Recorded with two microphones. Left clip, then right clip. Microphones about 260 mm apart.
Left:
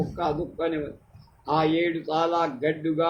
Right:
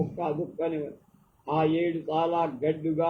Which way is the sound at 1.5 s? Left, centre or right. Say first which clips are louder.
Left 3 dB; left.